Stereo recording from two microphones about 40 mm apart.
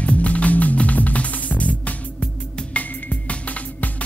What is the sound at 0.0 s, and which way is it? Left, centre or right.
Music, left.